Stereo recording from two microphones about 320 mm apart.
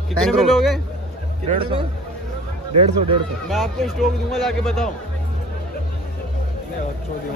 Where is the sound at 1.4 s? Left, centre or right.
Right.